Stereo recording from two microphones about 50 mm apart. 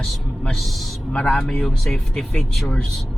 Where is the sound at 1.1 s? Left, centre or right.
Left.